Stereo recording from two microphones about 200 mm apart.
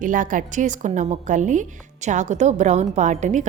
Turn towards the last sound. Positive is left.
turn(degrees=-35)  # may be behind; listen again after turning